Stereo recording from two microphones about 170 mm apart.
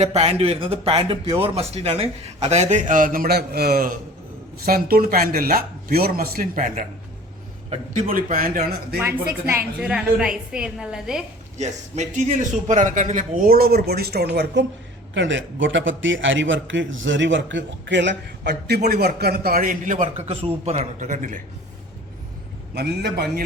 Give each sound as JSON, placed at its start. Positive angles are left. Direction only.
{"t": 0.0, "sound": "a man's voice", "side_deg": -40}
{"t": 7.7, "sound": "a man's voice", "side_deg": -35}
{"t": 8.1, "sound": "a man's voice", "side_deg": -55}
{"t": 9.5, "sound": "a woman's voice", "side_deg": -10}
{"t": 11.5, "sound": "a man's voice", "side_deg": -40}
{"t": 15.1, "sound": "a man's voice", "side_deg": -90}
{"t": 22.7, "sound": "a man's voice", "side_deg": -70}